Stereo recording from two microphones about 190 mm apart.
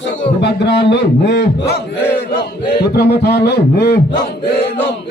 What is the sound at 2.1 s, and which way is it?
Battle cry, 60° left (ahead or behind).